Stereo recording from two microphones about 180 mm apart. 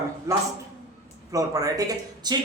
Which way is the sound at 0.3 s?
15° right (ahead or behind).